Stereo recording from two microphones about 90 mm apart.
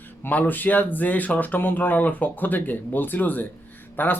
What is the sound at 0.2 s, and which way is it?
Speech, 20° left (ahead or behind).